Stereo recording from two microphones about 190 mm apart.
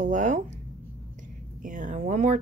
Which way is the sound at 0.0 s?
40° right (ahead or behind).